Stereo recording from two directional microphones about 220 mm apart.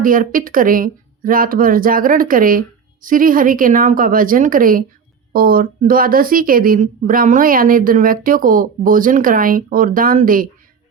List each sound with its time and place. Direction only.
0.0 s a woman's voice: 40° right (ahead or behind)